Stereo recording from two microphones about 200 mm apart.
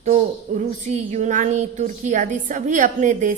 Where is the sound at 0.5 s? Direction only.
35° right (ahead or behind).